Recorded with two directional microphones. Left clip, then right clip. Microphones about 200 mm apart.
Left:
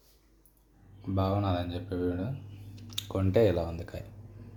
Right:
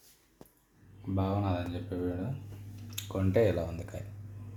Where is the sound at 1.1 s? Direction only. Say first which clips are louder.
Left 3 dB; 20° left (ahead or behind).